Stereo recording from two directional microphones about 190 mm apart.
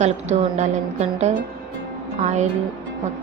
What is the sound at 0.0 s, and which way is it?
Speech, 35° right (ahead or behind).